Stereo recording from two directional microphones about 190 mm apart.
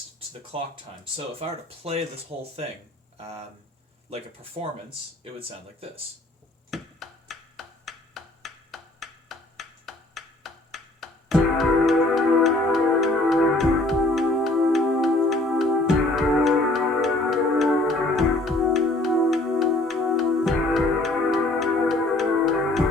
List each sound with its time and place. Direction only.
0.5 s speech: 30° right (ahead or behind)
3.2 s speech: 35° right (ahead or behind)
4.6 s speech: 30° right (ahead or behind)
6.7 s finger snapping: centre (ahead or behind)
16.1 s music: centre (ahead or behind)